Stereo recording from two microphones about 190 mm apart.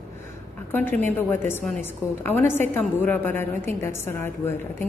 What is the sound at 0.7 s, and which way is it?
A woman's voice, 10° left (ahead or behind).